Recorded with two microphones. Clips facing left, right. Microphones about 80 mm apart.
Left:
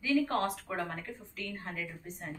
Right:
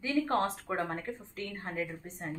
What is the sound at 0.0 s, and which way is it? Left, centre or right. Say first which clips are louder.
A woman's voice: even; right.